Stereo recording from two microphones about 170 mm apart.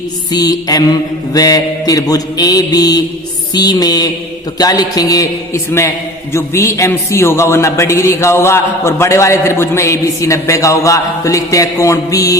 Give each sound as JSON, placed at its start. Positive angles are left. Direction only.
{"t": 0.3, "sound": "mantra", "side_deg": 25}
{"t": 6.3, "sound": "a man's voice", "side_deg": 15}